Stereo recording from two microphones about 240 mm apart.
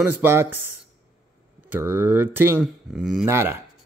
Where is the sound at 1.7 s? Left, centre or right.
Centre.